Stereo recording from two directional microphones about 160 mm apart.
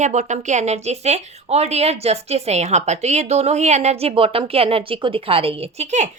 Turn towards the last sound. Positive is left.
turn(degrees=-45)  # may be behind; listen again after turning